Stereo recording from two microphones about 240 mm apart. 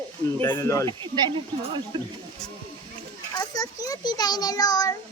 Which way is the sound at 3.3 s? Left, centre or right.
Centre.